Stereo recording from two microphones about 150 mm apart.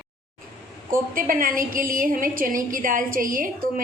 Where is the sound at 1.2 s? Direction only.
70° right (ahead or behind).